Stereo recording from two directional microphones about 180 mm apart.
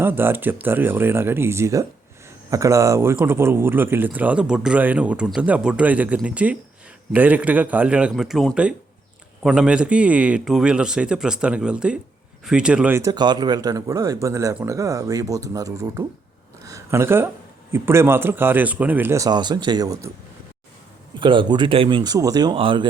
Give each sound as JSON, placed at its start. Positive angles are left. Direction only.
{"t": 0.0, "sound": "a man's voice", "side_deg": -10}
{"t": 13.0, "sound": "speech", "side_deg": -20}
{"t": 21.2, "sound": "speech", "side_deg": -25}